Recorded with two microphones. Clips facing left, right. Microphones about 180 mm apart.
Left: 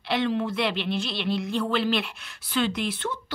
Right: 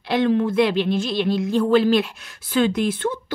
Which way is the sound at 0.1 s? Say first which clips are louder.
Right 7 dB; 45° right (ahead or behind).